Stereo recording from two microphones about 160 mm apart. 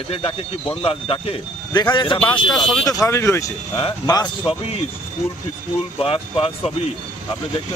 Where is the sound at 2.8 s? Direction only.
20° left (ahead or behind).